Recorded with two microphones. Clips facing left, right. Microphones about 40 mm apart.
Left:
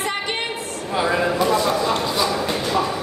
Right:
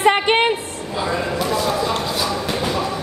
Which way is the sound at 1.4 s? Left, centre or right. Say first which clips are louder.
Left 1 dB; centre.